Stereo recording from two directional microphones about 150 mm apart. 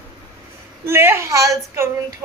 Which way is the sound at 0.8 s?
15° right (ahead or behind).